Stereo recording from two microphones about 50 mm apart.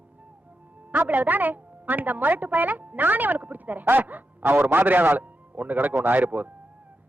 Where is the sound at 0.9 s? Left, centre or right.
Right.